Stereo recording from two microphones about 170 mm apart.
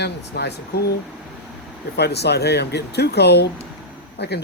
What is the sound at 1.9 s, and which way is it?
Speech, 75° left (ahead or behind).